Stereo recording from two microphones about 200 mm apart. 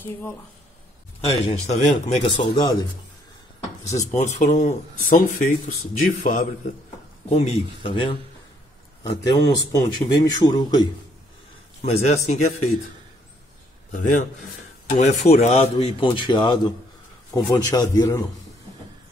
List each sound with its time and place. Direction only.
0.0 s speech: 10° left (ahead or behind)
1.2 s a man's voice: 30° left (ahead or behind)
4.1 s speech: 35° left (ahead or behind)
7.2 s a man's voice: 30° left (ahead or behind)
11.8 s speech: 35° left (ahead or behind)
14.9 s a man's voice: 35° left (ahead or behind); by 18.2 s 15° left (ahead or behind)